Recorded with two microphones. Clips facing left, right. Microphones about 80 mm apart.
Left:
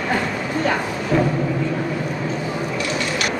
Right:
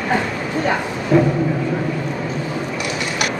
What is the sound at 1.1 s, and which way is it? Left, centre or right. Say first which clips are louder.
Speech: right 4 dB; centre.